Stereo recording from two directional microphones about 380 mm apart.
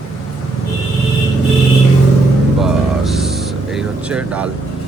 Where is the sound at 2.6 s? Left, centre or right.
Centre.